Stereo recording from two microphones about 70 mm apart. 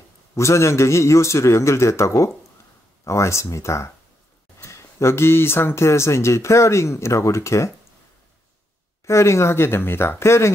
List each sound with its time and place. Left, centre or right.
0.3 s speech: left
9.0 s speech: left